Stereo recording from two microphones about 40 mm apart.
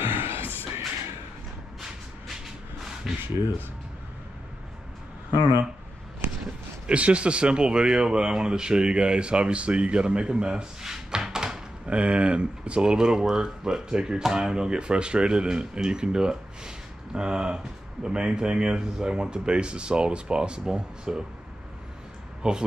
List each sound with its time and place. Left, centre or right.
0.0 s a sound: right
3.1 s speech: centre
6.9 s speech: right
11.9 s speech: right
22.4 s speech: right